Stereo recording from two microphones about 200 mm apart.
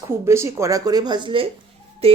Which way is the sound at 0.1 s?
15° right (ahead or behind).